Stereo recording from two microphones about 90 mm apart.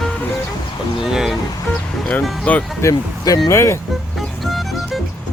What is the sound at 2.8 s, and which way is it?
Speech, 45° left (ahead or behind).